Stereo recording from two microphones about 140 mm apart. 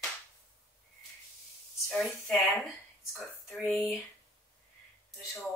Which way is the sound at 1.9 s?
Centre (ahead or behind).